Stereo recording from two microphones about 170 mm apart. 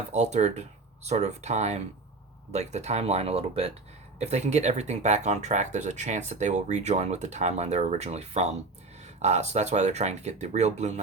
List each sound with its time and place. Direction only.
0.1 s speech: 40° right (ahead or behind)